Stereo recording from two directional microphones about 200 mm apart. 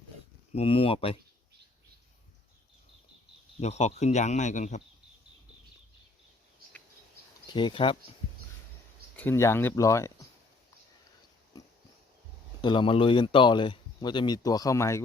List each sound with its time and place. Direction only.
0.5 s speech: 25° left (ahead or behind)
3.6 s speech: 35° left (ahead or behind)
7.4 s speech: 25° left (ahead or behind)
9.1 s speech: 10° left (ahead or behind)
12.6 s speech: 25° left (ahead or behind)